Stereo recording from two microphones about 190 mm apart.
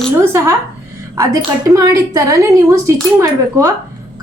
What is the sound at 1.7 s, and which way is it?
A woman's voice, 20° right (ahead or behind).